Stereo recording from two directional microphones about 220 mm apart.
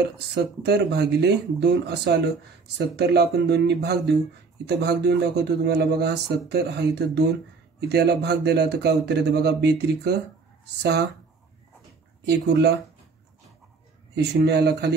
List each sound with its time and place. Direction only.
0.3 s speech: 50° right (ahead or behind)
12.3 s speech: 50° right (ahead or behind)
14.1 s speech: 50° right (ahead or behind)